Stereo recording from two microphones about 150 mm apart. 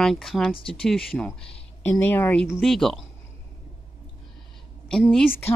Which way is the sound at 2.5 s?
Centre (ahead or behind).